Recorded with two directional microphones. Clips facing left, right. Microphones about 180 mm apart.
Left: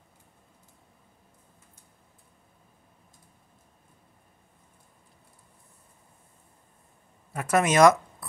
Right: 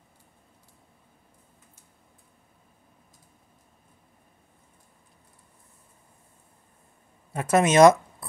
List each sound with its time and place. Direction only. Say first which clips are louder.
7.3 s speech: right 3 dB; 25° right (ahead or behind)